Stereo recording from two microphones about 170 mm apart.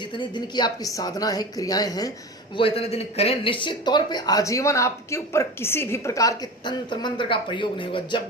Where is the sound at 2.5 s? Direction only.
35° left (ahead or behind).